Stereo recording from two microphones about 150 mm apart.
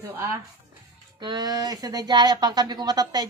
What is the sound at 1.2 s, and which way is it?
Speech, 30° right (ahead or behind).